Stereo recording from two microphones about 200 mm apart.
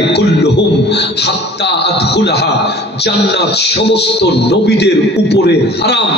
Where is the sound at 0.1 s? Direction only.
55° left (ahead or behind).